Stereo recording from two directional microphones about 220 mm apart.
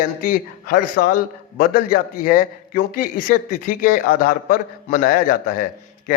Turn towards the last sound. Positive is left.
turn(degrees=40)  # may be behind; listen again after turning